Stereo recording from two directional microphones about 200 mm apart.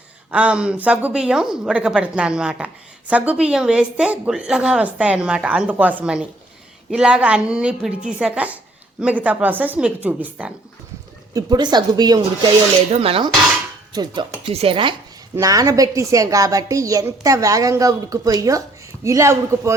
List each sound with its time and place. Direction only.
0.3 s a woman's voice: 5° right (ahead or behind)
11.3 s a woman's voice: 20° right (ahead or behind)